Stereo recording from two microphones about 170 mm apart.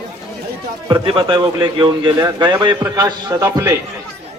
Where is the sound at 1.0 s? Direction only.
30° right (ahead or behind).